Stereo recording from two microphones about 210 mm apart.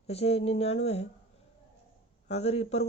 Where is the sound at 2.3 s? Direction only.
30° left (ahead or behind).